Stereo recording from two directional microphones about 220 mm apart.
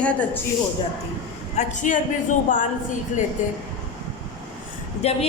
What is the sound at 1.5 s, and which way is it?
Speech, 35° left (ahead or behind).